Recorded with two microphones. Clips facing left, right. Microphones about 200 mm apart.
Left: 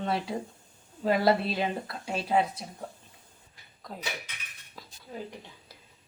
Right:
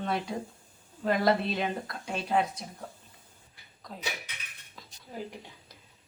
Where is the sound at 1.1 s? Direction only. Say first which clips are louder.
Left 2 dB; 5° left (ahead or behind).